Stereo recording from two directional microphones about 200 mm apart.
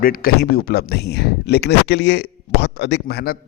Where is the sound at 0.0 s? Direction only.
45° left (ahead or behind).